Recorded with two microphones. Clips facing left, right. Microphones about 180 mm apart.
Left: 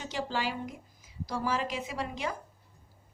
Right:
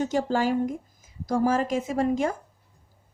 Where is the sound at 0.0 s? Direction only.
50° right (ahead or behind).